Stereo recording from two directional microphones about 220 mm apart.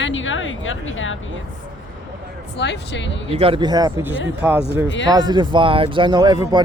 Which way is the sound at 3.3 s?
25° right (ahead or behind).